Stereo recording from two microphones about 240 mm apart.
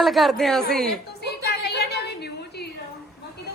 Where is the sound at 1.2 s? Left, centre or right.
Left.